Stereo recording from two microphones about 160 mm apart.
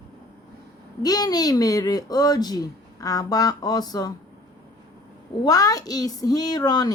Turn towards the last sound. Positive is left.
turn(degrees=25)  # may be behind; listen again after turning